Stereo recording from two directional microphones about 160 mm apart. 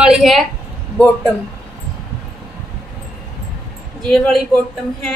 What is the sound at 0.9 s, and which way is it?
Speech, 15° left (ahead or behind).